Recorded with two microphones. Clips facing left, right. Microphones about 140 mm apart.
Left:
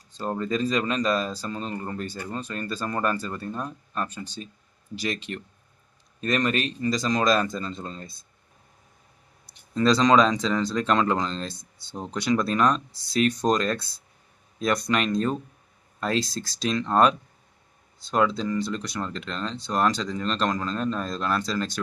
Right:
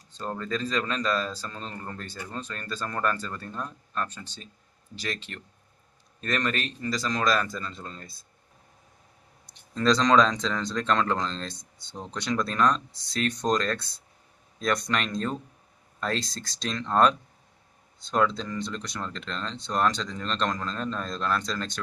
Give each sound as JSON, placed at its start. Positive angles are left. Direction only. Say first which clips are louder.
{"t": 0.1, "sound": "a man's voice", "louder": "left 4 dB", "side_deg": 10}
{"t": 9.5, "sound": "speech", "louder": "left 2 dB", "side_deg": 5}